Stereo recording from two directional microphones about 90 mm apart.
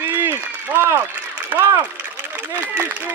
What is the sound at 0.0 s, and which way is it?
Applause, 20° right (ahead or behind).